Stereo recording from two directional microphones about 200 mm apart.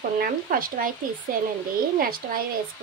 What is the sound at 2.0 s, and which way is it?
Speech, 45° right (ahead or behind).